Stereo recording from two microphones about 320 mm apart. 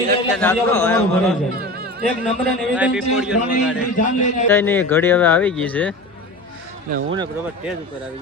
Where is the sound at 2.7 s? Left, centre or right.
Centre.